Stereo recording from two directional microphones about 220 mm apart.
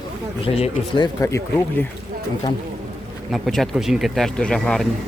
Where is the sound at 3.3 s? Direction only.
Centre (ahead or behind).